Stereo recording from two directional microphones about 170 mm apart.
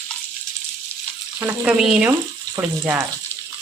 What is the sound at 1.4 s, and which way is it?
Speech, 10° right (ahead or behind).